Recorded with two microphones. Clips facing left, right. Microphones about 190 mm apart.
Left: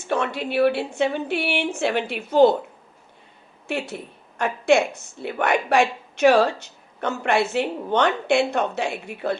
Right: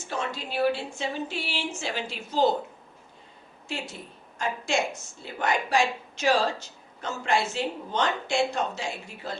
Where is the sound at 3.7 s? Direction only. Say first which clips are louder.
Left 8 dB; 60° left (ahead or behind).